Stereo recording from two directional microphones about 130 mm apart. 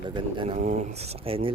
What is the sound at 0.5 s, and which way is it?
Speech, 60° right (ahead or behind).